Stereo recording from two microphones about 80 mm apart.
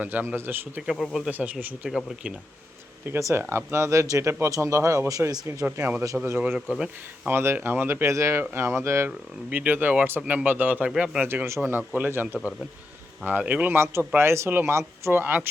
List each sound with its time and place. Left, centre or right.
0.0 s speech: right
0.8 s speech: centre
1.3 s speech: centre
1.9 s speech: centre
3.1 s speech: right
6.1 s speech: centre
7.3 s speech: right
9.0 s speech: centre
11.3 s speech: right
11.6 s speech: right
13.7 s speech: right